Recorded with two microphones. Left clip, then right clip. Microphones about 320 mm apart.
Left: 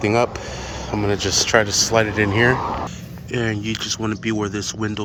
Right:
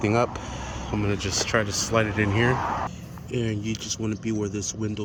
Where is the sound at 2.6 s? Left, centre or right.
Left.